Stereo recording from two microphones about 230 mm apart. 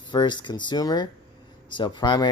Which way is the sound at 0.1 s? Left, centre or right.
Centre.